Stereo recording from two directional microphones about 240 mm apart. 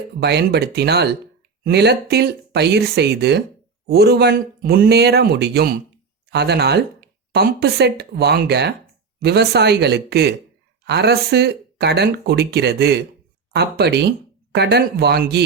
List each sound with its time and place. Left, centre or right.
0.2 s a man's voice: right